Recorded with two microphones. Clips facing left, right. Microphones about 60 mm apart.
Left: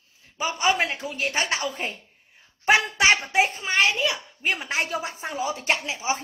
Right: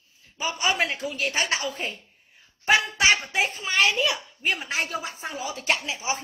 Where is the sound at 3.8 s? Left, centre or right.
Centre.